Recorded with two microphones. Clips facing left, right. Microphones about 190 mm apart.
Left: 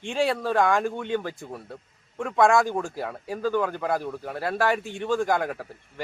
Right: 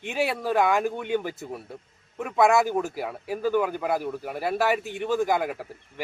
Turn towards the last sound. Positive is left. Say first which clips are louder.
# even
turn(degrees=-5)  # may be behind; listen again after turning